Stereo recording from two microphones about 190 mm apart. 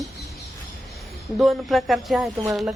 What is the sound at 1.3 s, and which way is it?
Speech, centre (ahead or behind).